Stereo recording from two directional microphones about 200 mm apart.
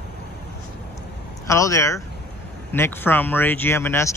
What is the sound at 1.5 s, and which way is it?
A man's voice, 15° left (ahead or behind).